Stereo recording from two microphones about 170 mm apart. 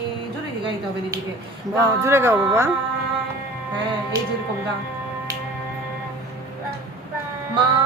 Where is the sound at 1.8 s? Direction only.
15° right (ahead or behind).